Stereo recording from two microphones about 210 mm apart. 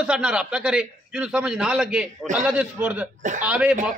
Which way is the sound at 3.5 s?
5° right (ahead or behind).